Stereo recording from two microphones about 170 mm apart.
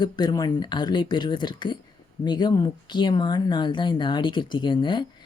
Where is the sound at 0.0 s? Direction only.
25° left (ahead or behind).